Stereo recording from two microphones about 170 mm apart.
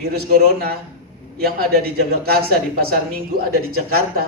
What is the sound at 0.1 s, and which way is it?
A man's voice, 65° right (ahead or behind).